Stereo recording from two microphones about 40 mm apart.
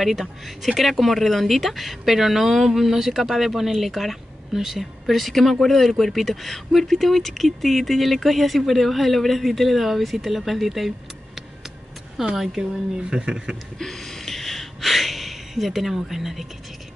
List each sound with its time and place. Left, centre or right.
0.0 s speech: centre
12.2 s speech: centre
12.9 s speech: centre
13.7 s a sound: centre